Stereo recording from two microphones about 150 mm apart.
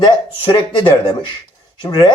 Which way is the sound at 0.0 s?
30° left (ahead or behind).